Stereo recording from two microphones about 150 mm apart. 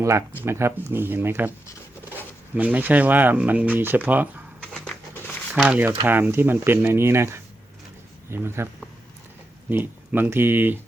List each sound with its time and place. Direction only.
0.0 s speech: 20° right (ahead or behind)
2.6 s speech: 10° right (ahead or behind)
4.6 s a sound: 5° left (ahead or behind)
5.5 s speech: 10° right (ahead or behind)